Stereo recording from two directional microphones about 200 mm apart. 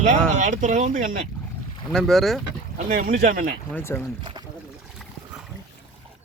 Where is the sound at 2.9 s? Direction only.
40° right (ahead or behind).